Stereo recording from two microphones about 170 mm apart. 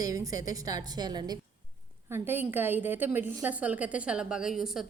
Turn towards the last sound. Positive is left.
turn(degrees=-5)  # may be behind; listen again after turning